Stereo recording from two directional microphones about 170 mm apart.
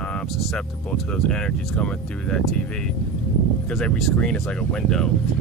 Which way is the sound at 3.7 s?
Centre (ahead or behind).